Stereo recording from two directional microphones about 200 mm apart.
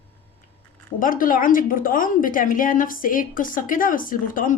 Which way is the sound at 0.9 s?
45° left (ahead or behind).